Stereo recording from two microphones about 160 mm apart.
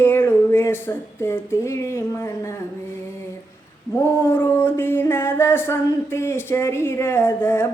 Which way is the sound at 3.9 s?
15° left (ahead or behind).